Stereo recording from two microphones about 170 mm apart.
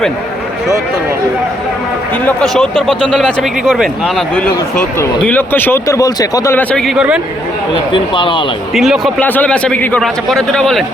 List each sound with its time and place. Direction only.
2.2 s a man's voice: 5° left (ahead or behind)
7.9 s speech: 30° left (ahead or behind)
8.7 s a man's voice: centre (ahead or behind)
9.2 s a man's voice: 10° left (ahead or behind)